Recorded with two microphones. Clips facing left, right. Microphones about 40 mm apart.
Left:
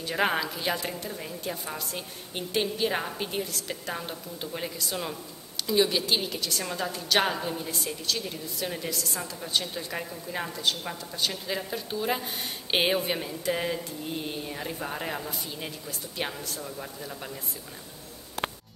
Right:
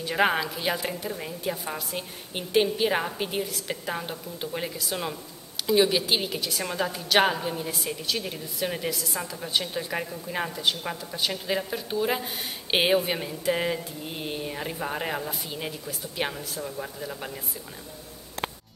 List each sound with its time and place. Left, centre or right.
0.0 s a woman's voice: centre
8.9 s a woman's voice: centre